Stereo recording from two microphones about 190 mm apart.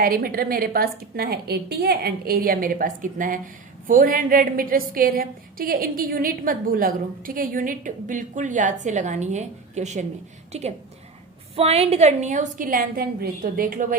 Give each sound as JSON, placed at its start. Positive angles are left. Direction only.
{"t": 0.0, "sound": "a woman's voice", "side_deg": -50}